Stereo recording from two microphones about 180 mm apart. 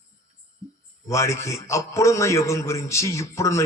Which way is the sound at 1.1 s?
15° left (ahead or behind).